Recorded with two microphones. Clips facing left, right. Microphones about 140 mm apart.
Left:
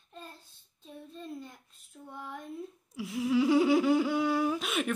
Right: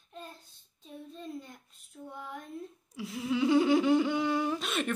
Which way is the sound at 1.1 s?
Centre (ahead or behind).